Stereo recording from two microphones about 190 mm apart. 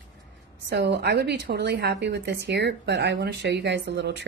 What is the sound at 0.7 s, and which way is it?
A woman's voice, 65° right (ahead or behind).